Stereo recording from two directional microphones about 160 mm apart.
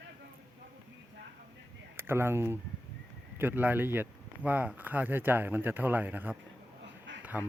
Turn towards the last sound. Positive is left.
turn(degrees=-10)  # may be behind; listen again after turning